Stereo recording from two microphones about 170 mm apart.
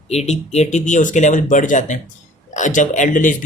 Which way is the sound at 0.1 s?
40° left (ahead or behind).